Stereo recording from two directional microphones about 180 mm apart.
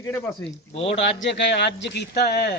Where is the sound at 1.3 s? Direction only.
70° left (ahead or behind).